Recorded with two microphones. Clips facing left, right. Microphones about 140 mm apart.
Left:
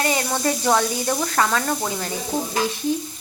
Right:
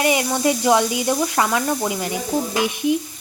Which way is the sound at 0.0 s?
15° right (ahead or behind).